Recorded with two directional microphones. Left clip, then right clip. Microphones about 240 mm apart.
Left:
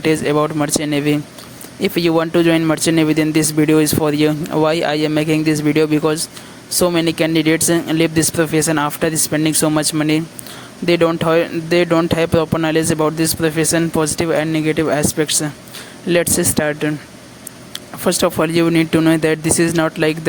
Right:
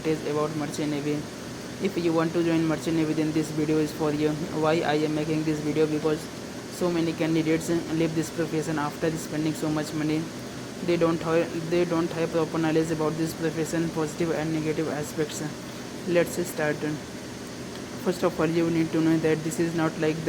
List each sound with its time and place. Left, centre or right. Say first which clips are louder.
0.0 s speech: left 11 dB; left
18.0 s speech: left 10 dB; left